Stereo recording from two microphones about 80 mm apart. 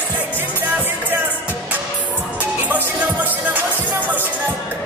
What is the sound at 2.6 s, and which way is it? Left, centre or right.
Music, right.